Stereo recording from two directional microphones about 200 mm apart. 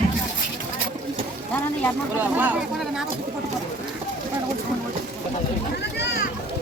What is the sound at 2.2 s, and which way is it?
Speech, 10° right (ahead or behind).